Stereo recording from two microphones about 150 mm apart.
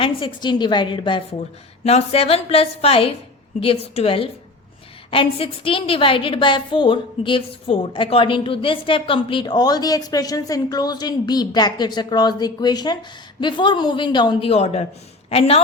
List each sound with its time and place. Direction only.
0.0 s a woman's voice: 35° left (ahead or behind)